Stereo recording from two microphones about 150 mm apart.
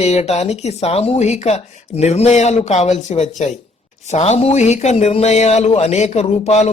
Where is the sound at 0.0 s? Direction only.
45° left (ahead or behind).